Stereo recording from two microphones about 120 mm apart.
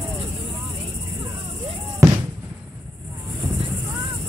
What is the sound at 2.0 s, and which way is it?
Music, 25° right (ahead or behind).